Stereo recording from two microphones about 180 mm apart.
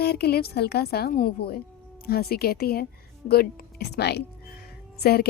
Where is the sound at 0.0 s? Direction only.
60° left (ahead or behind).